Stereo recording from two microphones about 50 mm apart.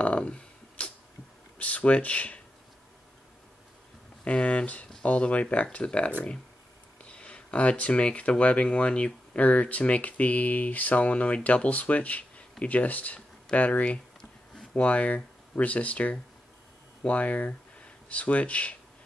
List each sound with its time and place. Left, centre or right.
0.0 s a sound: left
1.6 s speech: left
4.2 s speech: left